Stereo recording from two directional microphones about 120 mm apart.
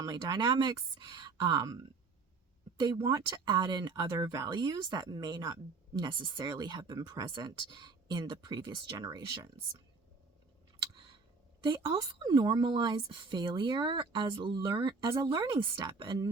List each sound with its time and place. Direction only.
0.0 s speech: 35° right (ahead or behind)
2.8 s speech: 30° right (ahead or behind)
11.6 s speech: 35° right (ahead or behind)